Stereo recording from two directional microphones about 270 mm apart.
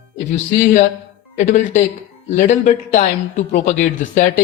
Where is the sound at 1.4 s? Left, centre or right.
Left.